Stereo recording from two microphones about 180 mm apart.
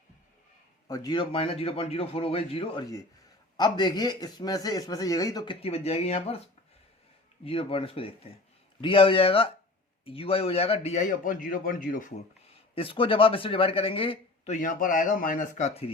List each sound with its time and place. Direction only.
0.9 s a man's voice: 20° left (ahead or behind)
5.6 s a man's voice: 35° left (ahead or behind)
7.4 s a man's voice: 30° left (ahead or behind); by 12.2 s 45° left (ahead or behind)
12.7 s a man's voice: 30° left (ahead or behind)